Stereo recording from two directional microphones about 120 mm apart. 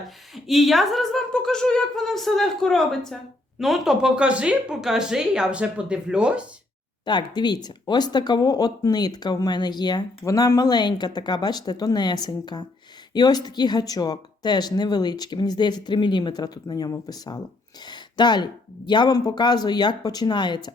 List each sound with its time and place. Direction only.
0.3 s speech: centre (ahead or behind)
7.0 s speech: 40° left (ahead or behind)